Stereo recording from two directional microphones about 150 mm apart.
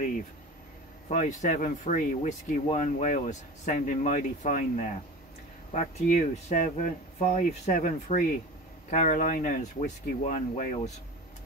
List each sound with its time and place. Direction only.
1.0 s a man's voice: 50° left (ahead or behind)